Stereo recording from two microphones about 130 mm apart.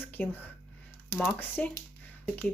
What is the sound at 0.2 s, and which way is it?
Speech, 15° left (ahead or behind).